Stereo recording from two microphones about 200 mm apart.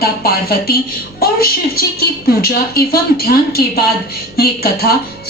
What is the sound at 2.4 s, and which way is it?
Speech, 50° left (ahead or behind).